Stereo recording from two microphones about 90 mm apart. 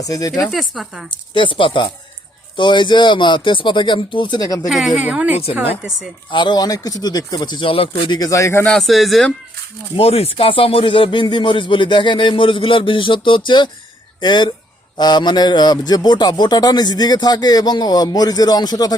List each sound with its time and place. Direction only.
0.0 s speech: 40° left (ahead or behind)
0.5 s speech: centre (ahead or behind)
1.1 s speech: 65° left (ahead or behind)
4.4 s a man's voice: 45° left (ahead or behind)
4.7 s speech: centre (ahead or behind)
4.9 s a woman's voice: 15° right (ahead or behind)
6.3 s a man's voice: 55° left (ahead or behind)
8.2 s speech: 35° left (ahead or behind)
8.6 s speech: 5° left (ahead or behind)
10.0 s a man's voice: 90° left; by 18.9 s 50° left (ahead or behind)